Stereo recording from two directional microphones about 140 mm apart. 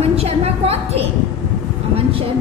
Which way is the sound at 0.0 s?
45° right (ahead or behind).